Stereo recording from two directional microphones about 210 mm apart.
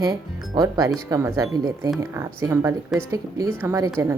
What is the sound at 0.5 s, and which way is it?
Speech, 20° right (ahead or behind).